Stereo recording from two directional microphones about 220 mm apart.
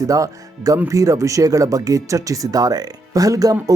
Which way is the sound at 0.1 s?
15° right (ahead or behind).